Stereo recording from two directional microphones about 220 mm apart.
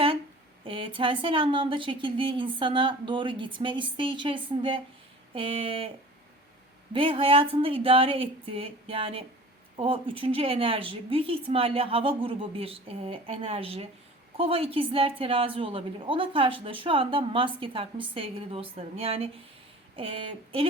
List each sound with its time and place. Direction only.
0.6 s a woman's voice: 25° right (ahead or behind)
6.9 s a woman's voice: 25° right (ahead or behind)